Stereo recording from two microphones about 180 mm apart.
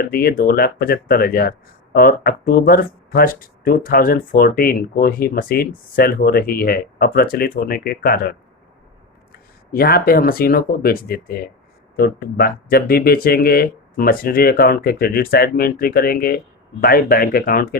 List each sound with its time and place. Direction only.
0.0 s speech: 60° left (ahead or behind)
9.7 s speech: 55° left (ahead or behind)